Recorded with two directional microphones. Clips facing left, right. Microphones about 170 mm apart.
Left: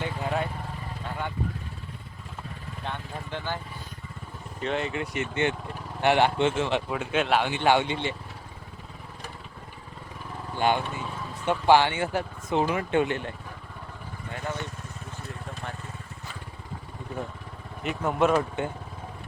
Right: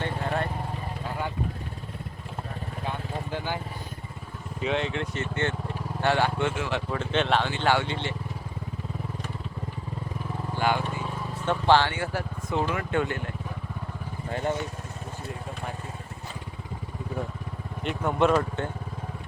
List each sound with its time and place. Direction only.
2.8 s vehicle: 10° right (ahead or behind)
4.6 s speech: centre (ahead or behind)
5.1 s speech: 15° left (ahead or behind)
6.9 s speech: 5° left (ahead or behind)
10.6 s speech: 20° left (ahead or behind)
14.3 s speech: 30° right (ahead or behind)
17.8 s speech: centre (ahead or behind)